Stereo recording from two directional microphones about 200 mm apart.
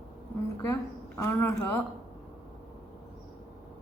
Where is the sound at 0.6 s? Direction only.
15° left (ahead or behind).